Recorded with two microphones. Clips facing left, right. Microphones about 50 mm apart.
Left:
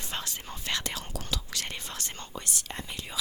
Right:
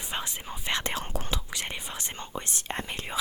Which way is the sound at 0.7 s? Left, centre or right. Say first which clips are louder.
Right 4 dB; right.